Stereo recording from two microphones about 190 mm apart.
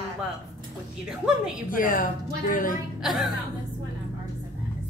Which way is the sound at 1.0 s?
5° right (ahead or behind).